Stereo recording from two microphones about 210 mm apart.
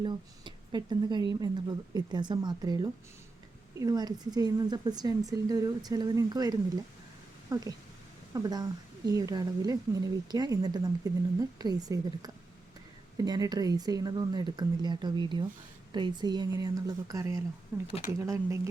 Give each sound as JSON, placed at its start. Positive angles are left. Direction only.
{"t": 0.0, "sound": "speech", "side_deg": -20}